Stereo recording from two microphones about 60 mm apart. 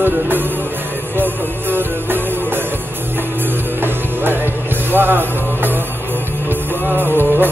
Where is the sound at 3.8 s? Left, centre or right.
Right.